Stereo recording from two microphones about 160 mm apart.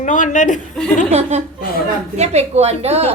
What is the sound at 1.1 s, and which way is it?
A woman's voice, 45° right (ahead or behind).